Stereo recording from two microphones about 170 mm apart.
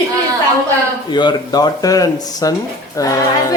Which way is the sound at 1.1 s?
25° left (ahead or behind).